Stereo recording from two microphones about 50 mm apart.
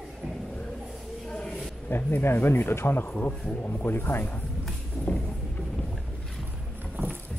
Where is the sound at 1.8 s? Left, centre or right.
Left.